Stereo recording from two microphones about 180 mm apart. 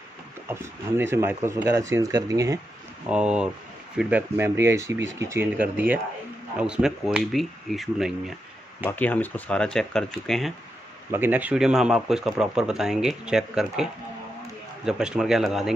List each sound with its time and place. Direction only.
0.5 s speech: 15° right (ahead or behind)
3.1 s speech: 5° right (ahead or behind)
11.1 s speech: 10° right (ahead or behind)
14.9 s speech: 5° right (ahead or behind)